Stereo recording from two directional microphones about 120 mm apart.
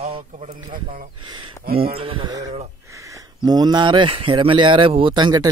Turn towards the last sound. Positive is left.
turn(degrees=-40)  # may be behind; listen again after turning